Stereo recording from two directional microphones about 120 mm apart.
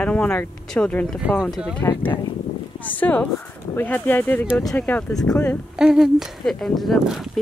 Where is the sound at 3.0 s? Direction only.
10° left (ahead or behind).